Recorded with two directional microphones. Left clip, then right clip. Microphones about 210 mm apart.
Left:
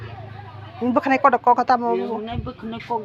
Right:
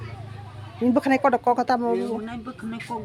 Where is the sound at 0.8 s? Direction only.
20° right (ahead or behind).